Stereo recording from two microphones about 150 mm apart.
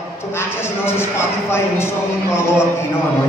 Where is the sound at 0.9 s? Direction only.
15° left (ahead or behind).